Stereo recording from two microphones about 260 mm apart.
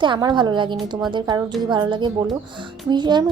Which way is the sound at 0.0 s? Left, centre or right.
Centre.